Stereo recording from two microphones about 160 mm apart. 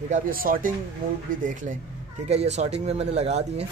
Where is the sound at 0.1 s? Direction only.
60° right (ahead or behind).